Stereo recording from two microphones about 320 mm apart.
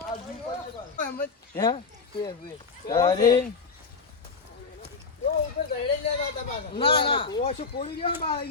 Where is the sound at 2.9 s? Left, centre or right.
Centre.